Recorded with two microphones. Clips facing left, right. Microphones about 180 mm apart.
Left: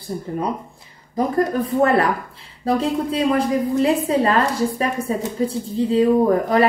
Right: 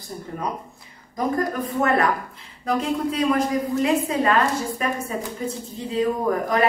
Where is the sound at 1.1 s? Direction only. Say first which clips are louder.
Left 4 dB; 30° left (ahead or behind).